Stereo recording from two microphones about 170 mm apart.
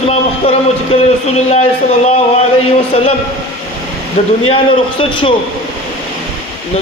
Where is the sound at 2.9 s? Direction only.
35° left (ahead or behind).